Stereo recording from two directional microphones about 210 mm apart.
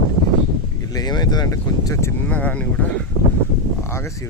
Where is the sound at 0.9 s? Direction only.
20° left (ahead or behind).